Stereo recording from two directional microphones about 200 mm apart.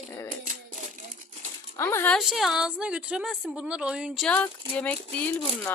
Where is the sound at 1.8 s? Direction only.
10° left (ahead or behind).